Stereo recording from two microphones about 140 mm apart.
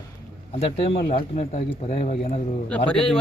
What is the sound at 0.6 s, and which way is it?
Speech, 55° left (ahead or behind).